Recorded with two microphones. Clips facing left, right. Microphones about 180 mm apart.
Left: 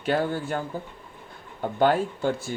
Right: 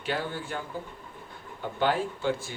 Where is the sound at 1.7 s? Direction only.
45° left (ahead or behind).